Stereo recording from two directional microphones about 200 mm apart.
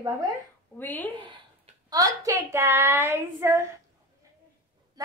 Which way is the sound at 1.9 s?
15° right (ahead or behind).